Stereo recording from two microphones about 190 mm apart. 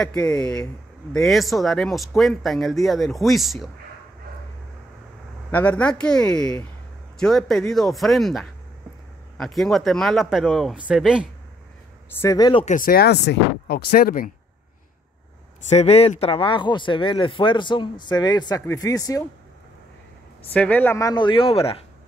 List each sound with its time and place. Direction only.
0.0 s speech: 5° left (ahead or behind)
5.5 s speech: 10° left (ahead or behind)
12.2 s speech: 20° left (ahead or behind)
12.6 s speech: 45° left (ahead or behind)
15.7 s speech: 35° left (ahead or behind); by 19.2 s 20° left (ahead or behind)
20.5 s speech: 10° left (ahead or behind); by 21.7 s 30° left (ahead or behind)